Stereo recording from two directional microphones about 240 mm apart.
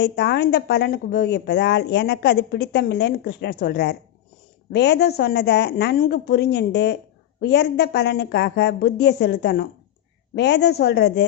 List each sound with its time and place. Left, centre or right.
0.0 s a woman's voice: left